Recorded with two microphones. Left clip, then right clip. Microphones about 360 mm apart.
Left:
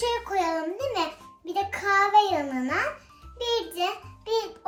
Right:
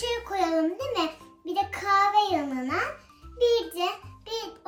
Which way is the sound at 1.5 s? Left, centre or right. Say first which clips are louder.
Even; left.